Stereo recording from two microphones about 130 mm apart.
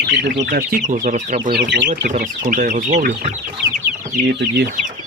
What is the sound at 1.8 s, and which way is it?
Speech, 90° right.